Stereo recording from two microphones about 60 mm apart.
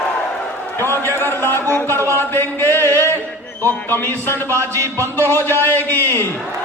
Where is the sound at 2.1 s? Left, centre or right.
Left.